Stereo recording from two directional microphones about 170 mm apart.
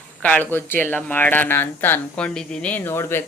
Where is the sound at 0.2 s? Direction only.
10° left (ahead or behind).